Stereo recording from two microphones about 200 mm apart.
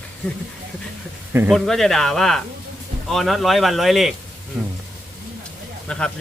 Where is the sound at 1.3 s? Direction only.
10° right (ahead or behind).